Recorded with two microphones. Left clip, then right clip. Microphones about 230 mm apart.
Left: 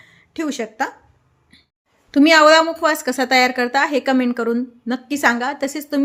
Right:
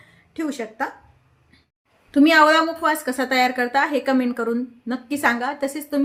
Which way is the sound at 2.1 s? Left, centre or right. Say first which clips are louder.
Left 4 dB; left.